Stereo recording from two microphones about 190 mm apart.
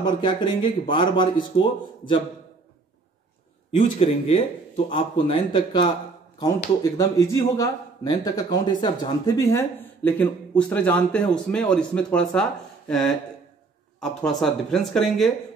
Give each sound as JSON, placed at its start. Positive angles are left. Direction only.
{"t": 0.0, "sound": "speech", "side_deg": 25}
{"t": 3.7, "sound": "speech", "side_deg": 30}
{"t": 14.2, "sound": "speech", "side_deg": 0}